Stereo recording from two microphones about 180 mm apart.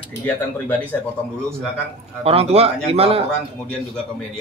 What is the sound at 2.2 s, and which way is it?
Speech, 35° right (ahead or behind).